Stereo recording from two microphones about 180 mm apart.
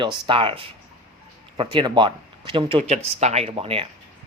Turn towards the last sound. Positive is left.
turn(degrees=-30)  # may be behind; listen again after turning